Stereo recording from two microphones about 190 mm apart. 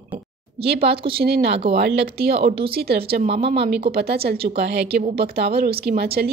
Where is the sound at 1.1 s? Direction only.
55° right (ahead or behind).